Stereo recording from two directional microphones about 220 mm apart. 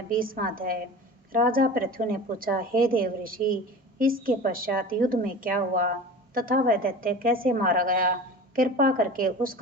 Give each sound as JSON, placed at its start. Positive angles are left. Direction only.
{"t": 0.1, "sound": "a woman's voice", "side_deg": -40}